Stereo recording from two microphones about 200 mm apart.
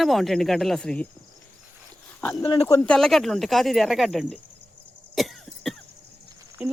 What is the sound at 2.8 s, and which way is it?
Speech, 5° left (ahead or behind).